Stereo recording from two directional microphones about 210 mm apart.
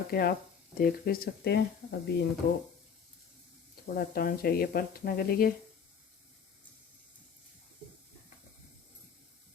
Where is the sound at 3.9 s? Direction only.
45° left (ahead or behind).